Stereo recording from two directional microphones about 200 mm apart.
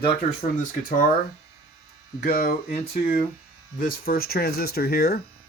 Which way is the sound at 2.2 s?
40° left (ahead or behind).